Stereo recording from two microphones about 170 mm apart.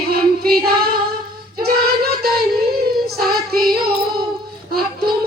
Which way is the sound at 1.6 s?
65° right (ahead or behind).